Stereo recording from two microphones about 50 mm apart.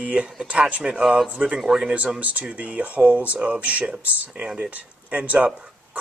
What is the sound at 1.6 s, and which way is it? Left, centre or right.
Speech, centre.